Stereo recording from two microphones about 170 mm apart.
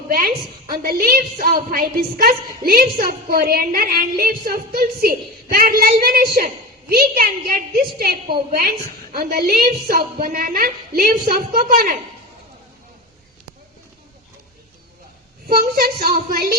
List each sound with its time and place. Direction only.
0.8 s a woman's voice: 60° right (ahead or behind)
15.4 s a woman's voice: 65° right (ahead or behind)